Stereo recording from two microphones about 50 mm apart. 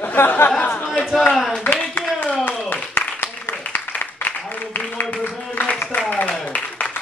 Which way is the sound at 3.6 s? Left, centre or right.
Left.